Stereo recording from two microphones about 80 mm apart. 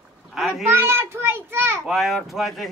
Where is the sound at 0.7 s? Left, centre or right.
Right.